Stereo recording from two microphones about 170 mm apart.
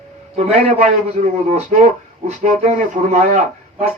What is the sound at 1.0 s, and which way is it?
Speech, 40° right (ahead or behind).